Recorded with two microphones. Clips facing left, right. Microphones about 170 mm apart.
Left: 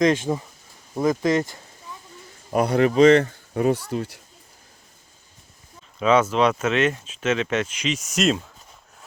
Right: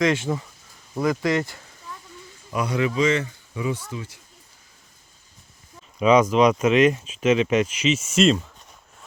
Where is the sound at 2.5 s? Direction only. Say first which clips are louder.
Left 5 dB; 50° left (ahead or behind).